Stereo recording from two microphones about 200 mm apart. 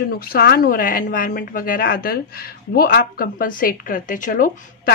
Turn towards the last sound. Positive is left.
turn(degrees=45)  # may be behind; listen again after turning